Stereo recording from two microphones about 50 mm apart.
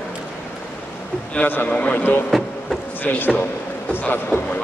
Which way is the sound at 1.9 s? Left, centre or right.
Left.